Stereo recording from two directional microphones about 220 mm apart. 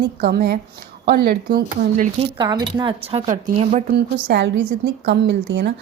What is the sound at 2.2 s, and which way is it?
Speech, 20° right (ahead or behind).